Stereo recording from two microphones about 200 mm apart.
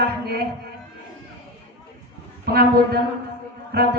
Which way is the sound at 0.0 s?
50° right (ahead or behind).